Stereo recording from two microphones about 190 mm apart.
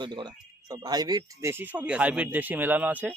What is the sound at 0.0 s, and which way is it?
Speech, 25° right (ahead or behind).